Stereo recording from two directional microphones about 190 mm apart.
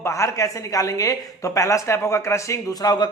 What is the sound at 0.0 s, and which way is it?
A woman's voice, 15° left (ahead or behind).